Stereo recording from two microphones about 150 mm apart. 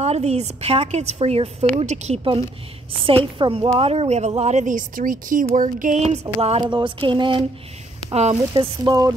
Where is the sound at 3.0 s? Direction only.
35° right (ahead or behind).